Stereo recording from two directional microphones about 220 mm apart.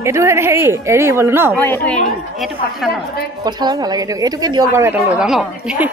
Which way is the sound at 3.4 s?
20° right (ahead or behind).